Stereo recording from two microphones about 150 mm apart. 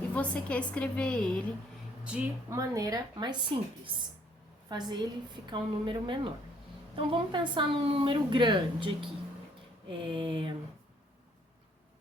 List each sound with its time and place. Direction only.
0.1 s a woman's voice: 10° left (ahead or behind)
2.0 s a woman's voice: 10° right (ahead or behind)
2.6 s a woman's voice: 25° right (ahead or behind)